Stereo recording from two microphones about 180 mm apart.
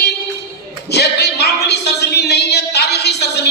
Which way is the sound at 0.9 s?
65° left (ahead or behind).